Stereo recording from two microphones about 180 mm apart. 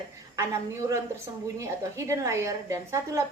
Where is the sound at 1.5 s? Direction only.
15° right (ahead or behind).